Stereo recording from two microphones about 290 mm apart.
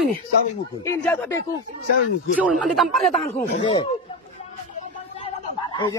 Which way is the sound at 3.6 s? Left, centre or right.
Centre.